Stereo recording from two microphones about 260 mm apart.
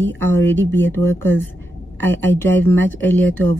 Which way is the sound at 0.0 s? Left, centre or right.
Centre.